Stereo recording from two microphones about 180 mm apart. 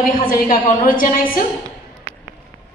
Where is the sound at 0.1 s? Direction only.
50° left (ahead or behind).